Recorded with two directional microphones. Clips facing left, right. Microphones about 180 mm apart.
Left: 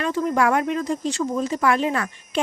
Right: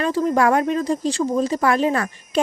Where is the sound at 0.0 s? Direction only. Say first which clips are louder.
Right 3 dB; 35° right (ahead or behind).